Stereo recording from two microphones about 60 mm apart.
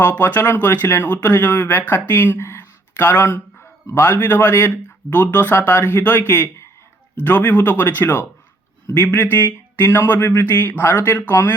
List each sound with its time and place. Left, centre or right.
0.0 s a man's voice: left